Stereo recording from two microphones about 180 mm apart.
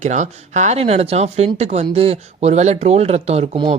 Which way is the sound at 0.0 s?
40° right (ahead or behind).